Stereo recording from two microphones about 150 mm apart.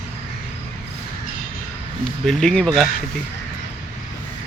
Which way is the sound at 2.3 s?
5° left (ahead or behind).